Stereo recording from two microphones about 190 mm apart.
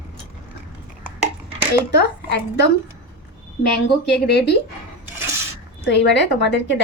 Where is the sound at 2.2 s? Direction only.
65° left (ahead or behind).